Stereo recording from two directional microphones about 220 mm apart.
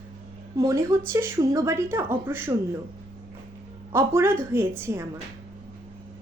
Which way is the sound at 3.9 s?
10° right (ahead or behind).